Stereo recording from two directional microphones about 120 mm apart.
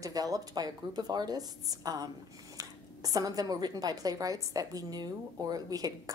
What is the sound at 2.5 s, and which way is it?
A woman's voice, 30° right (ahead or behind).